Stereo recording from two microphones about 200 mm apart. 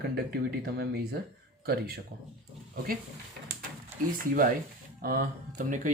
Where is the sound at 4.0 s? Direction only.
45° right (ahead or behind).